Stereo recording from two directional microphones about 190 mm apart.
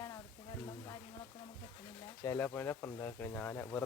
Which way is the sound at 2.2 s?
15° left (ahead or behind).